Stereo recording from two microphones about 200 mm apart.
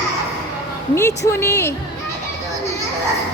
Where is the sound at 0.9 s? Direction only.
15° left (ahead or behind).